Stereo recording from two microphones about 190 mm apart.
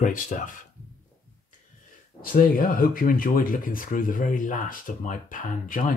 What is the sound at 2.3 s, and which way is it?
Speech, 45° left (ahead or behind).